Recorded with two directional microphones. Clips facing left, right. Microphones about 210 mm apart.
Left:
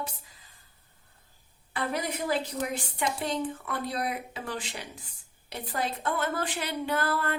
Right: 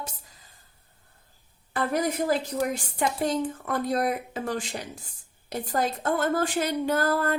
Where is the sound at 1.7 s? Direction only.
45° right (ahead or behind).